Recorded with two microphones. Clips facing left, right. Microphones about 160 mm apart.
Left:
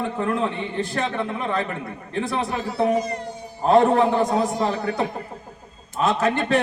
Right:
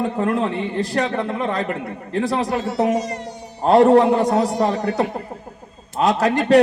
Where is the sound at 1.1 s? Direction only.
35° right (ahead or behind).